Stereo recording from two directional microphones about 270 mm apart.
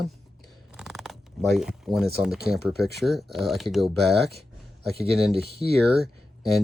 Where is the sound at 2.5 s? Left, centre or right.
Centre.